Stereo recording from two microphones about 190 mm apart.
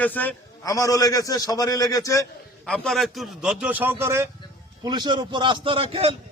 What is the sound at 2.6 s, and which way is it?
A man's voice, centre (ahead or behind).